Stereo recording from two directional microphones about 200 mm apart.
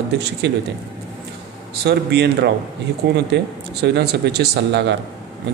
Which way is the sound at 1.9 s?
55° right (ahead or behind).